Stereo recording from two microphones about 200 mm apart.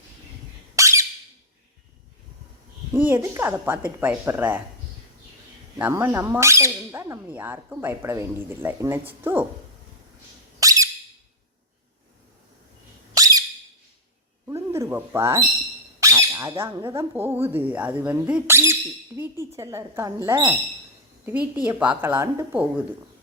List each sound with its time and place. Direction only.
0.8 s squeak: 15° right (ahead or behind)
2.9 s speech: 10° right (ahead or behind)
5.8 s speech: 10° right (ahead or behind)
10.6 s squeak: 15° right (ahead or behind)
13.1 s squeak: 20° right (ahead or behind)
14.4 s a sound: 15° right (ahead or behind)
16.0 s speech: 15° right (ahead or behind)